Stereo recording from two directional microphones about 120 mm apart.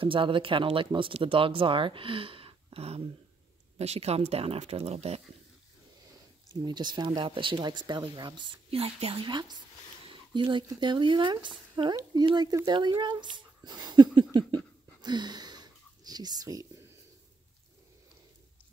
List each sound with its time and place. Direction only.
0.0 s speech: 45° right (ahead or behind); by 5.2 s 60° right (ahead or behind)
6.5 s speech: 35° right (ahead or behind)
10.0 s a sound: 40° right (ahead or behind)
10.7 s speech: 40° right (ahead or behind)